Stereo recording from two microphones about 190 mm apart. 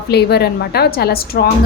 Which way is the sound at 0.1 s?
60° left (ahead or behind).